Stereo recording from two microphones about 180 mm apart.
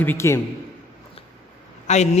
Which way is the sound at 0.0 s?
15° left (ahead or behind).